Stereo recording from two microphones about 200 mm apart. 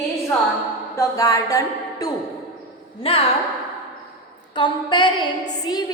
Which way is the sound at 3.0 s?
30° left (ahead or behind).